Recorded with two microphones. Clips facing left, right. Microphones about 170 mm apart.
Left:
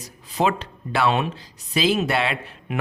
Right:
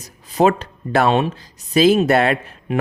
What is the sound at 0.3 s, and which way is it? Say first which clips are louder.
Speech: right 6 dB; 45° right (ahead or behind).